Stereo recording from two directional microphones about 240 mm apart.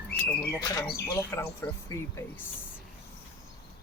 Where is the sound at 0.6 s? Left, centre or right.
Centre.